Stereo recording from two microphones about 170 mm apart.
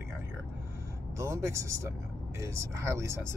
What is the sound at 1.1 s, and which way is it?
Speech, 15° right (ahead or behind).